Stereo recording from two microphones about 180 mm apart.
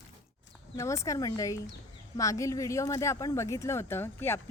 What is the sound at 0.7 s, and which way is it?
Speech, 15° left (ahead or behind).